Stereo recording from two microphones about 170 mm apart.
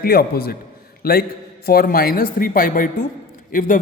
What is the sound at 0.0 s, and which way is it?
Speech, 65° left (ahead or behind).